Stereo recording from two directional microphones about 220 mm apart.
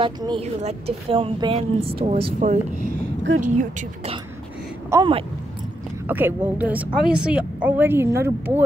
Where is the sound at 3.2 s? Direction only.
60° right (ahead or behind).